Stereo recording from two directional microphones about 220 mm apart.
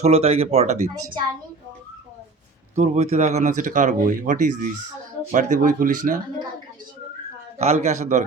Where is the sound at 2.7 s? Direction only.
30° right (ahead or behind).